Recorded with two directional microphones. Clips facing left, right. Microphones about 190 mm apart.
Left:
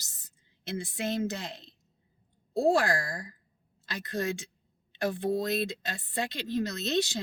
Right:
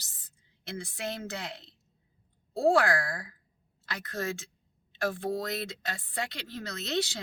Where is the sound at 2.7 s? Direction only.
60° right (ahead or behind).